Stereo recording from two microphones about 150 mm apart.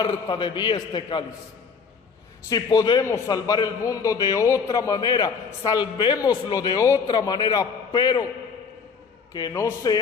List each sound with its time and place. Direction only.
0.0 s a man's voice: 30° left (ahead or behind)
2.5 s a man's voice: 25° left (ahead or behind)
9.3 s a man's voice: 20° left (ahead or behind)